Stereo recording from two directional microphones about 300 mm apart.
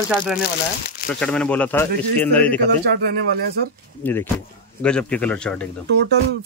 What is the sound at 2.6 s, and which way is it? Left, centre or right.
Speech, right.